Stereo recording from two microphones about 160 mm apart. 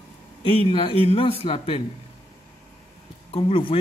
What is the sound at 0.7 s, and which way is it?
Speech, 35° left (ahead or behind).